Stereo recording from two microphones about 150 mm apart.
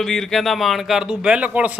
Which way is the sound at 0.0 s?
5° left (ahead or behind).